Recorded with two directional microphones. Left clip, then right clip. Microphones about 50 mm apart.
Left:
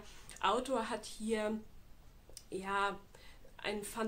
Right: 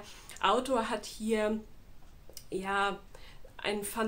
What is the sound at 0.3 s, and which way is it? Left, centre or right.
Speech, centre.